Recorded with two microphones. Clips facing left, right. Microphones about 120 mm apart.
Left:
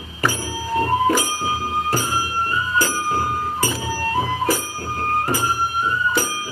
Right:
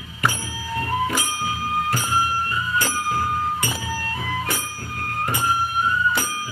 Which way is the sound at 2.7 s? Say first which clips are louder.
Left 2 dB; 35° left (ahead or behind).